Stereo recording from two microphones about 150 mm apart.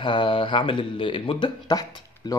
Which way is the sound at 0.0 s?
35° left (ahead or behind).